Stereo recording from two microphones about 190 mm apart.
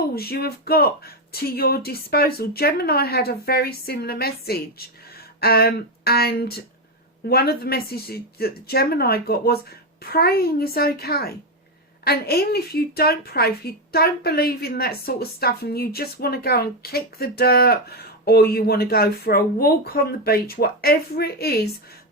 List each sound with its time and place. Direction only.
0.1 s speech: 55° left (ahead or behind)